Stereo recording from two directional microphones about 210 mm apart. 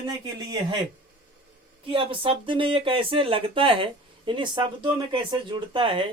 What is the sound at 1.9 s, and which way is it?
Speech, 25° right (ahead or behind).